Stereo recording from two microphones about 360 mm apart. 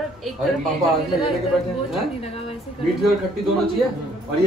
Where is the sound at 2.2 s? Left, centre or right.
Centre.